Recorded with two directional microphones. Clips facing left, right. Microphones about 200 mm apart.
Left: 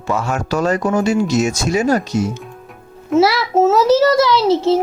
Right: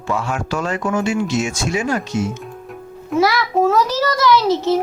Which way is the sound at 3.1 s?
25° left (ahead or behind).